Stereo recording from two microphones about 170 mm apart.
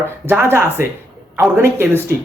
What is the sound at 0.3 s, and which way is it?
Speech, 15° right (ahead or behind).